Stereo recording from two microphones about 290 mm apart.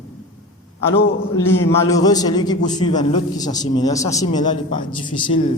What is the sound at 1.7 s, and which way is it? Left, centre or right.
A man's voice, centre.